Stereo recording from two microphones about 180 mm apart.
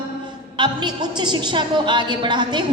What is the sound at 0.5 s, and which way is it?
A woman's voice, 25° right (ahead or behind).